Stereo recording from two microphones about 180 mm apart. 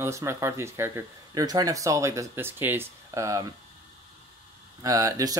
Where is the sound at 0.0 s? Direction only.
15° right (ahead or behind).